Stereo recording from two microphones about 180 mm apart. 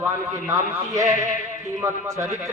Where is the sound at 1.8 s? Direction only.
15° right (ahead or behind).